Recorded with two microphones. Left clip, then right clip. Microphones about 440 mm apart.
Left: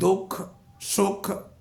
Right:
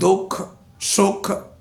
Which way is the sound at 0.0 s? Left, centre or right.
Left.